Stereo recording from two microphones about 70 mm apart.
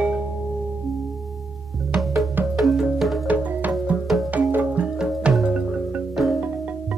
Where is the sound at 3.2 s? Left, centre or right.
Right.